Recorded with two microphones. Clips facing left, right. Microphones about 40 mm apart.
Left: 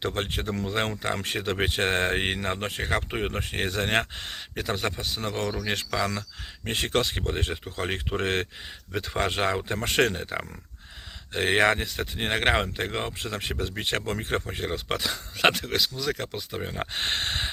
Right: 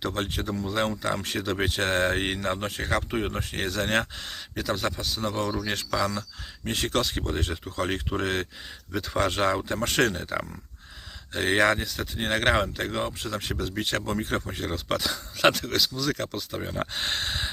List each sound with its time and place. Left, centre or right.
0.0 s speech: left
16.9 s speech: left